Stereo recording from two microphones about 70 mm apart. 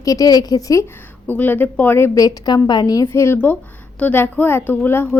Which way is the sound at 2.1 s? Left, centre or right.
Left.